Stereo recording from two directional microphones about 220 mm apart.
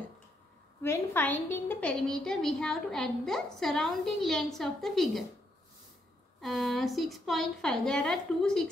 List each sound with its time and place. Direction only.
0.8 s a woman's voice: 10° left (ahead or behind)
6.4 s a woman's voice: centre (ahead or behind)